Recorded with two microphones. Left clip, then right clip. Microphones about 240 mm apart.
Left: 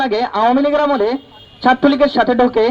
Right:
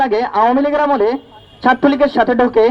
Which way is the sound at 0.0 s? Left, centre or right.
Left.